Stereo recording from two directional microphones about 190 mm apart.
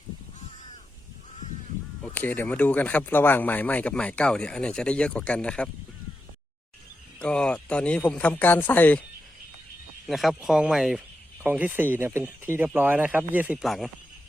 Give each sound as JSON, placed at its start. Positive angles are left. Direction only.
{"t": 2.1, "sound": "speech", "side_deg": 10}
{"t": 7.2, "sound": "speech", "side_deg": 5}
{"t": 10.1, "sound": "speech", "side_deg": 0}